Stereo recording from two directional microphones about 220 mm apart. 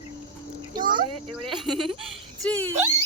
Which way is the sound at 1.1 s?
90° right.